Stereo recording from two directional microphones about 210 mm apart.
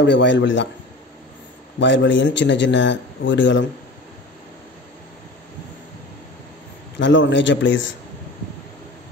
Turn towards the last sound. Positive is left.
turn(degrees=60)  # may be behind; listen again after turning